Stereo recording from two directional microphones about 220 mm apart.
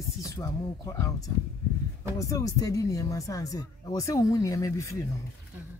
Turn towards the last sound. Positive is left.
turn(degrees=15)  # may be behind; listen again after turning